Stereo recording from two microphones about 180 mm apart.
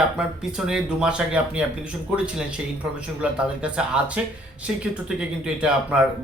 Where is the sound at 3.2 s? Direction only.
5° right (ahead or behind).